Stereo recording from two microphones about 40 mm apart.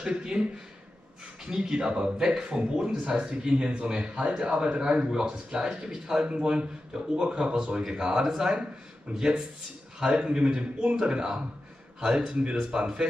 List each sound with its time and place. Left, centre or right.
0.0 s speech: right
9.1 s speech: right
9.9 s speech: centre